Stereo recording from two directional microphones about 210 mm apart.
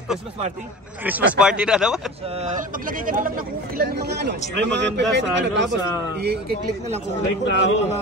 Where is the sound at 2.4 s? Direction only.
40° right (ahead or behind); by 5.6 s 60° right (ahead or behind).